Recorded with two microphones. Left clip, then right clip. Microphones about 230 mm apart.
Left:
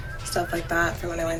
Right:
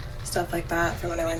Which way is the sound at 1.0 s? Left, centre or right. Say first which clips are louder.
Even; centre.